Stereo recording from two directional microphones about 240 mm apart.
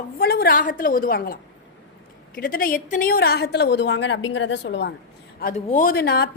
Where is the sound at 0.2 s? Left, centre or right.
Left.